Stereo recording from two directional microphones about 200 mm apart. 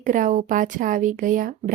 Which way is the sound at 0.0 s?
40° right (ahead or behind).